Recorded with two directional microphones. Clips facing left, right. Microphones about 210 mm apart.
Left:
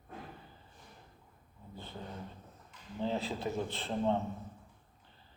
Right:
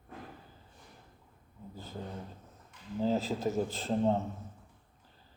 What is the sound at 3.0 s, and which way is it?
A man's voice, 40° right (ahead or behind).